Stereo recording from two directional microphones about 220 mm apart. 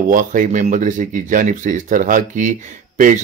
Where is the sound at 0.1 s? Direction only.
35° right (ahead or behind).